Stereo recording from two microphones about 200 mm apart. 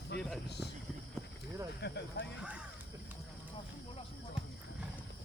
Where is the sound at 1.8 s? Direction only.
60° left (ahead or behind).